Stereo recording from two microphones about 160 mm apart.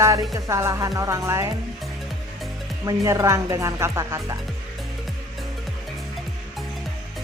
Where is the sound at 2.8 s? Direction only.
20° right (ahead or behind).